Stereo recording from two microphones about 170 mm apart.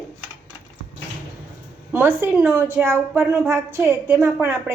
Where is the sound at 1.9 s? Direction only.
15° right (ahead or behind).